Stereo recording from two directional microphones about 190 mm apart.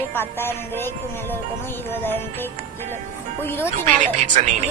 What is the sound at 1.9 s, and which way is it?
Music, 10° left (ahead or behind).